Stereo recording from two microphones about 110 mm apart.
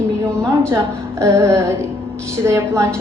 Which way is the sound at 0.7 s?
25° right (ahead or behind).